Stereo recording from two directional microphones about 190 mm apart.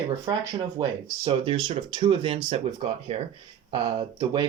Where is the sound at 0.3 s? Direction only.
20° right (ahead or behind).